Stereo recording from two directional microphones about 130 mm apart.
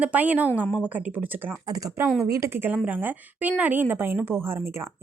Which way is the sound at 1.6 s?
25° right (ahead or behind).